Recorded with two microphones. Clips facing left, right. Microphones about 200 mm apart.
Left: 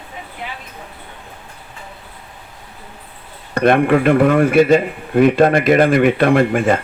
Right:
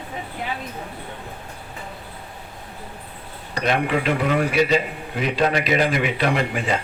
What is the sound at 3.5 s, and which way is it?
A man's voice, 55° left (ahead or behind).